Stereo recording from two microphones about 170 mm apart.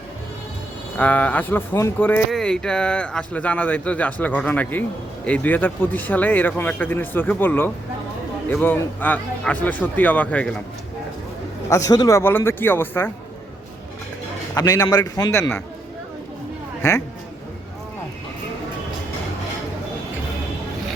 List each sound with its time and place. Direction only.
0.9 s speech: 10° left (ahead or behind)
11.7 s speech: 20° left (ahead or behind)
14.5 s a man's voice: 20° left (ahead or behind)